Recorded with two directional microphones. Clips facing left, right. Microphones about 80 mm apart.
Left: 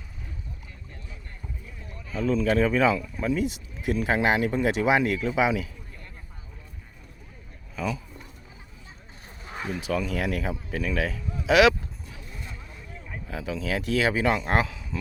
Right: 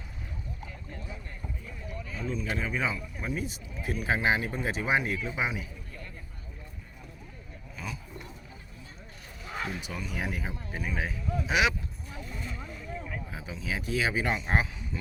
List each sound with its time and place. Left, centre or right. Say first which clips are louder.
2.2 s speech: left 11 dB; left
3.8 s speech: left 4 dB; left
9.9 s speech: left 8 dB; left
12.3 s vehicle: right 3 dB; centre
13.3 s speech: left 9 dB; left